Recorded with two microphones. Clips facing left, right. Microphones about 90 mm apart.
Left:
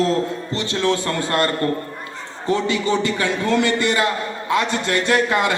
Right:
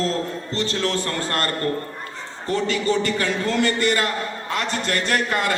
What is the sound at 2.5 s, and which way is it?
Speech, 20° left (ahead or behind).